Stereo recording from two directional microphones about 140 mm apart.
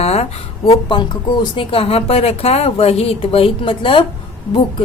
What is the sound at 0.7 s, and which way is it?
Speech, 35° left (ahead or behind).